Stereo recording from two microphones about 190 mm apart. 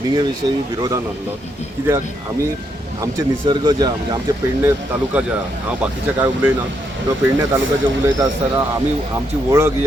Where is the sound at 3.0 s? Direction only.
25° right (ahead or behind).